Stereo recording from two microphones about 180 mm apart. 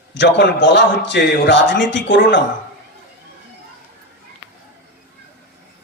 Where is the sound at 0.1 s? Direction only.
80° left.